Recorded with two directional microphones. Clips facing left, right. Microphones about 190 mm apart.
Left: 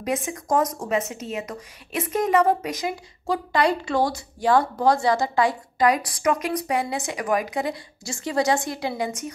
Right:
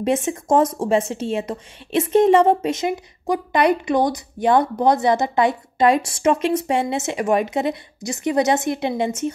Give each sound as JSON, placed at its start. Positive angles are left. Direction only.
{"t": 0.0, "sound": "speech", "side_deg": -25}